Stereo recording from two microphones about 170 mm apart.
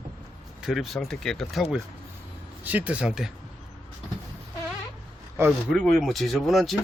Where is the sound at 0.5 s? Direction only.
Centre (ahead or behind).